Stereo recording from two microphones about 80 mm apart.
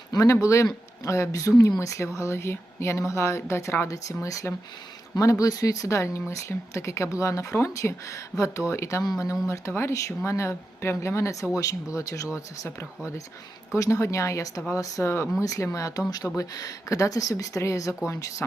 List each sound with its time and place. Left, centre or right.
0.1 s a woman's voice: left
13.7 s a woman's voice: left
16.0 s a woman's voice: left